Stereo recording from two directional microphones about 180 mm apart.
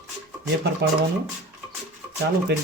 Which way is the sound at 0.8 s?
70° right (ahead or behind).